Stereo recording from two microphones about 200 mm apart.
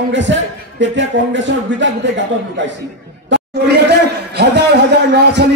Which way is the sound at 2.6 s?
65° right (ahead or behind).